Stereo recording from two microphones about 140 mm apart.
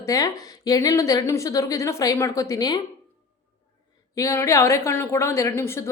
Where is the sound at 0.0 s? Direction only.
25° left (ahead or behind).